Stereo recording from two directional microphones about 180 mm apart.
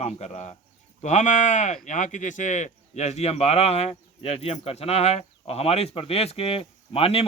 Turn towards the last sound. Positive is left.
turn(degrees=30)  # may be behind; listen again after turning